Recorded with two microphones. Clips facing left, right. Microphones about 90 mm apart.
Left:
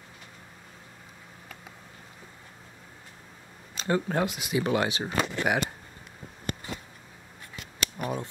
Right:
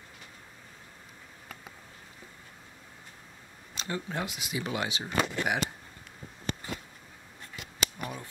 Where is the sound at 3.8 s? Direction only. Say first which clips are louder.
Left 8 dB; 50° left (ahead or behind).